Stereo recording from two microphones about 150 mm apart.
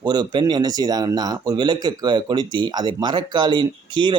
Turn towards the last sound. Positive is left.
turn(degrees=-30)  # may be behind; listen again after turning